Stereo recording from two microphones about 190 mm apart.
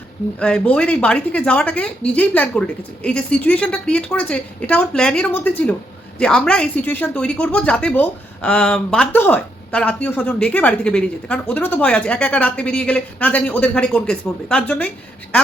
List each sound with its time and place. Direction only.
0.3 s speech: 5° left (ahead or behind)